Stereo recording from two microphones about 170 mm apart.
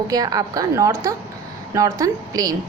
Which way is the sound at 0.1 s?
20° right (ahead or behind).